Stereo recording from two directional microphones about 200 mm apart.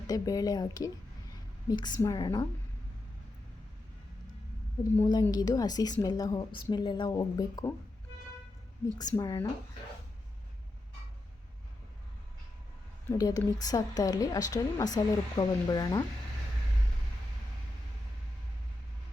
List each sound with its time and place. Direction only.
0.1 s a woman's voice: 20° left (ahead or behind)
4.8 s a woman's voice: 20° left (ahead or behind)
9.0 s a woman's voice: 20° left (ahead or behind)
13.1 s a woman's voice: 20° left (ahead or behind)